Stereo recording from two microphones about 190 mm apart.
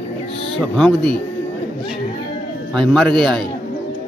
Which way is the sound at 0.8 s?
5° left (ahead or behind).